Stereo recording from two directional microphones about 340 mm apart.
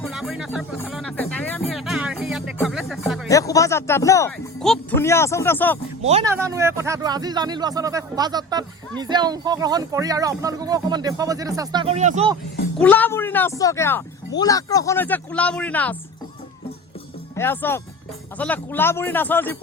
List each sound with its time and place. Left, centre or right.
0.0 s music: centre
3.2 s speech: centre
6.0 s speech: centre
12.7 s speech: centre
17.3 s speech: centre